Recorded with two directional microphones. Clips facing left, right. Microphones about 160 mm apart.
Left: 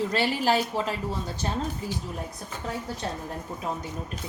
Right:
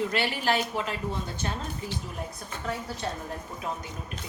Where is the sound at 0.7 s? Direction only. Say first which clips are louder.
Left 3 dB; 35° left (ahead or behind).